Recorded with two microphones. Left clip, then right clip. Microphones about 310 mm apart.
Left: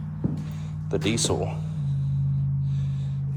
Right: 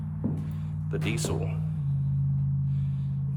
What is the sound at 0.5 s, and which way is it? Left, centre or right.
Speech, centre.